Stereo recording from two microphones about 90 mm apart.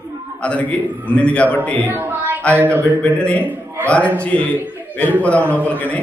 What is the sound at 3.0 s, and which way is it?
A man's voice, 15° left (ahead or behind).